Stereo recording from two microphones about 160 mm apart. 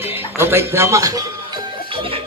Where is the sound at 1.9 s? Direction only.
35° right (ahead or behind).